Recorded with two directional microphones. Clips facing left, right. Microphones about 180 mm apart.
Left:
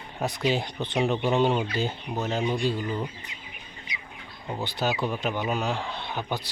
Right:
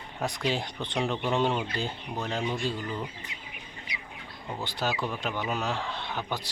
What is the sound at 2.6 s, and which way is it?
Speech, 10° left (ahead or behind).